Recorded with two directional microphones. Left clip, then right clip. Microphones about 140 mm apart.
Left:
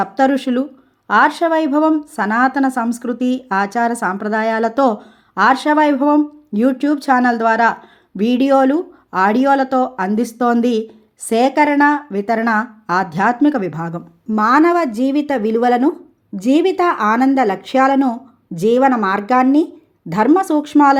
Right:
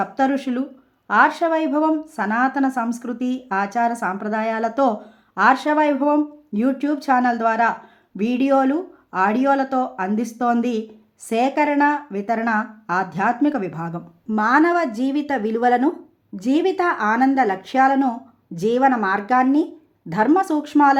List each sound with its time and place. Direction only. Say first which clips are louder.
0.0 s a woman's voice: left 5 dB; 35° left (ahead or behind)